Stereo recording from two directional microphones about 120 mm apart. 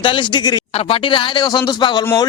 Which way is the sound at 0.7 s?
50° left (ahead or behind).